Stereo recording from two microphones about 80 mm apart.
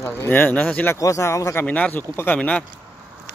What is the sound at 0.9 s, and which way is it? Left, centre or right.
Speech, left.